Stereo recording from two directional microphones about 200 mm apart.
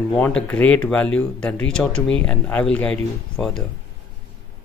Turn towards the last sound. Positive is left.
turn(degrees=5)  # may be behind; listen again after turning